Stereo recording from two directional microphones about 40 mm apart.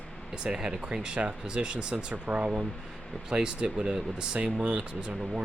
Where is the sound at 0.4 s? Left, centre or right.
Right.